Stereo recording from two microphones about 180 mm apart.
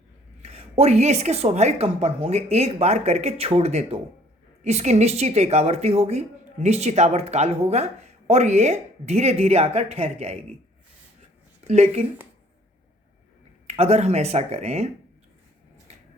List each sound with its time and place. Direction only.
0.4 s a woman's voice: 35° right (ahead or behind)
11.7 s a woman's voice: 35° right (ahead or behind)
13.7 s a woman's voice: 35° right (ahead or behind)
15.9 s a sound: 35° right (ahead or behind)